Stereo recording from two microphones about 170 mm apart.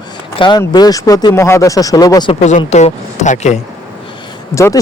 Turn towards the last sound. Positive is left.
turn(degrees=20)  # may be behind; listen again after turning